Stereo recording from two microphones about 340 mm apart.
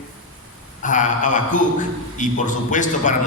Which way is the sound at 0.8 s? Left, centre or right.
Left.